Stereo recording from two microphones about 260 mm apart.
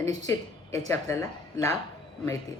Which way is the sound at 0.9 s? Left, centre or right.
Centre.